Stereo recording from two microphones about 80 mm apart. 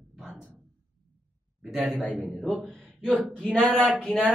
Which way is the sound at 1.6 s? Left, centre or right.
Centre.